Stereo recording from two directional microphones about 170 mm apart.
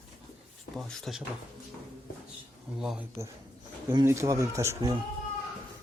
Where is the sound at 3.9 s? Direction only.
15° right (ahead or behind).